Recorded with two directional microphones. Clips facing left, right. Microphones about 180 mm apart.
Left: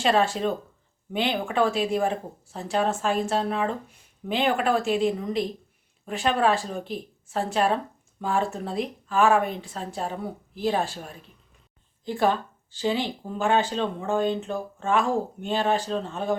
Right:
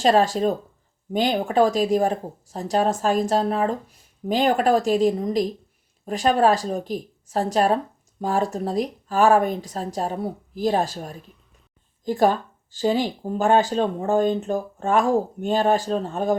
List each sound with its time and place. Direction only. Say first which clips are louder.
0.0 s speech: right 4 dB; 40° right (ahead or behind)